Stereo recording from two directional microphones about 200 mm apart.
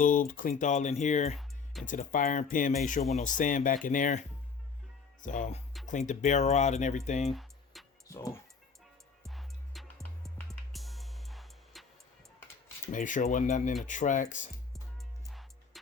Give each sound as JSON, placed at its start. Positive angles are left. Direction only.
{"t": 0.0, "sound": "speech", "side_deg": 40}
{"t": 7.3, "sound": "tick-tock", "side_deg": 0}
{"t": 8.0, "sound": "speech", "side_deg": 15}
{"t": 9.2, "sound": "music", "side_deg": 0}
{"t": 12.9, "sound": "speech", "side_deg": 40}
{"t": 15.3, "sound": "music", "side_deg": 0}